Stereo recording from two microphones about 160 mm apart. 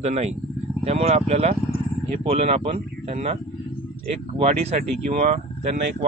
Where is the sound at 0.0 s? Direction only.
45° right (ahead or behind).